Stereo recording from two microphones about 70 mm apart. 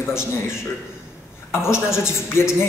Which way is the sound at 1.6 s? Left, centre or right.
Left.